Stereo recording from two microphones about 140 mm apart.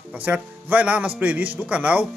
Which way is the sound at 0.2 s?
10° right (ahead or behind).